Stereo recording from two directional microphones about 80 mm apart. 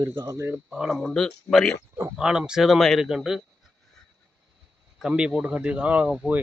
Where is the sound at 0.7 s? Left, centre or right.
Centre.